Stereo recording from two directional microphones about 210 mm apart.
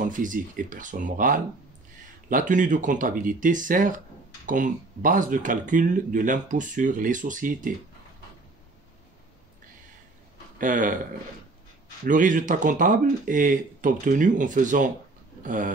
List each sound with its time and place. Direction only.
0.0 s speech: 40° right (ahead or behind)
10.6 s speech: 40° right (ahead or behind)
12.1 s speech: 40° right (ahead or behind)